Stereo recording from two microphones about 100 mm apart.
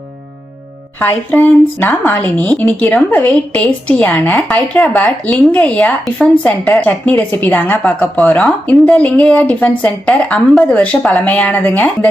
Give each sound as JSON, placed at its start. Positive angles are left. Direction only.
{"t": 0.9, "sound": "a woman's voice", "side_deg": 20}